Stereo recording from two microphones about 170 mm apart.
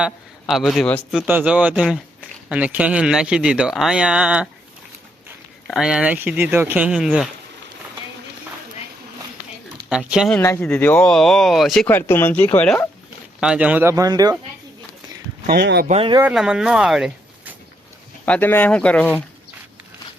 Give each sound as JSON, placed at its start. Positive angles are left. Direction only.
{"t": 0.0, "sound": "speech", "side_deg": 0}
{"t": 1.1, "sound": "speech", "side_deg": -5}
{"t": 5.6, "sound": "speech", "side_deg": 0}
{"t": 9.9, "sound": "speech", "side_deg": -5}
{"t": 10.6, "sound": "speech", "side_deg": 10}
{"t": 11.9, "sound": "speech", "side_deg": 15}
{"t": 13.4, "sound": "speech", "side_deg": -5}
{"t": 15.4, "sound": "speech", "side_deg": -75}
{"t": 15.9, "sound": "speech", "side_deg": -35}
{"t": 16.2, "sound": "speech", "side_deg": -5}
{"t": 18.3, "sound": "speech", "side_deg": 10}